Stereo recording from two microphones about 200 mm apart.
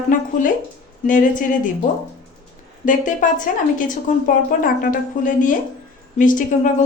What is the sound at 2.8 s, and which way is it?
Speech, 40° left (ahead or behind).